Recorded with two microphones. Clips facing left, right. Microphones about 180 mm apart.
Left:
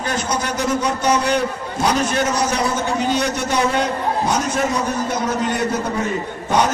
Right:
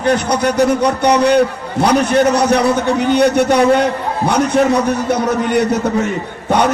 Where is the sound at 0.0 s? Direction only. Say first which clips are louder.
Right 8 dB; 65° right (ahead or behind).